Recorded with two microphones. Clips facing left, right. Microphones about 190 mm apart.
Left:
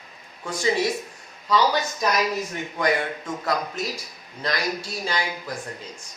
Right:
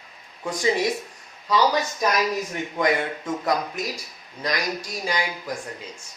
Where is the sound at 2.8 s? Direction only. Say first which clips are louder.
Right 1 dB; 20° right (ahead or behind).